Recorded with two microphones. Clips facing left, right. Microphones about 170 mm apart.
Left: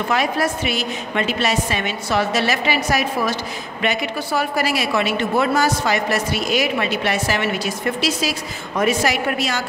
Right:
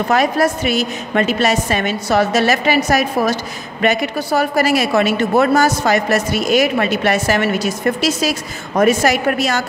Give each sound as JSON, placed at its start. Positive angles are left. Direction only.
{"t": 0.1, "sound": "a woman's voice", "side_deg": -40}